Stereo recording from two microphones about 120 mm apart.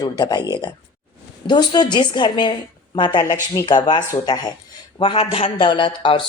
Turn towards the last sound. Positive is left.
turn(degrees=45)  # may be behind; listen again after turning